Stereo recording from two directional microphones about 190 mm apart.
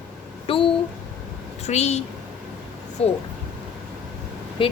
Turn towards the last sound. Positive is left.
turn(degrees=25)  # may be behind; listen again after turning